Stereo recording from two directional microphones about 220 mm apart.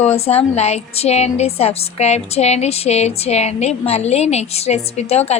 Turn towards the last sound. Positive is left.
turn(degrees=30)  # may be behind; listen again after turning